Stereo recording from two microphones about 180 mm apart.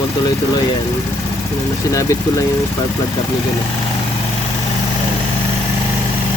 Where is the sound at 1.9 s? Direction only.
15° left (ahead or behind).